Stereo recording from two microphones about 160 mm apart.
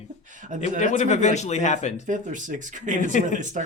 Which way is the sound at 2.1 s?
55° right (ahead or behind).